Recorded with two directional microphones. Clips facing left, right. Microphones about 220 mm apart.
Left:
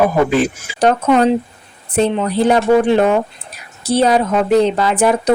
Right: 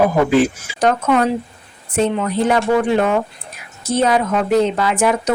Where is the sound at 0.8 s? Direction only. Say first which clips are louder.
Left 3 dB; 30° left (ahead or behind).